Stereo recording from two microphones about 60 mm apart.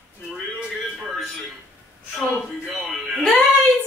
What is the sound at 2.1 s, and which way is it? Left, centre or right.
Speech, centre.